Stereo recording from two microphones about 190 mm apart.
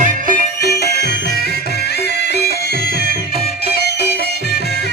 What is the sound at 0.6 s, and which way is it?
Music, 60° left (ahead or behind).